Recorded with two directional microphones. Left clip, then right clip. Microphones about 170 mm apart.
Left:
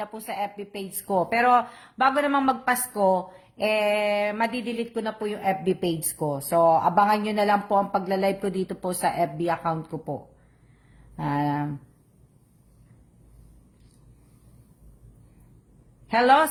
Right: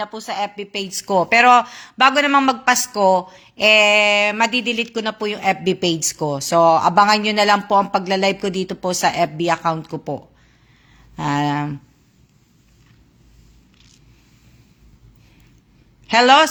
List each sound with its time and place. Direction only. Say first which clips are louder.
0.0 s a woman's voice: right 7 dB; 10° right (ahead or behind)
11.2 s speech: right 6 dB; 20° right (ahead or behind)
16.0 s a woman's voice: right 7 dB; 20° right (ahead or behind)